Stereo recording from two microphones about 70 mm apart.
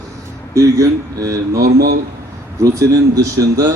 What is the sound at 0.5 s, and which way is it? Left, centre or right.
A man's voice, right.